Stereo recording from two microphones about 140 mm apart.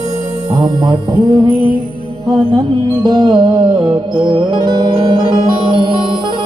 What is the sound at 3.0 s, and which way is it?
Music, 35° right (ahead or behind).